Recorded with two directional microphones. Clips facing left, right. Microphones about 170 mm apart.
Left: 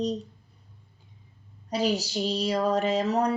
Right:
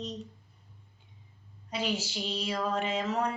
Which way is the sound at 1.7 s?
40° left (ahead or behind).